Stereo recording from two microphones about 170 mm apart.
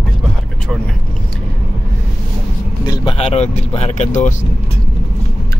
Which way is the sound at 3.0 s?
35° left (ahead or behind).